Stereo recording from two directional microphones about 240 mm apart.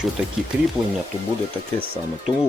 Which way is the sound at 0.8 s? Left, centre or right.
Centre.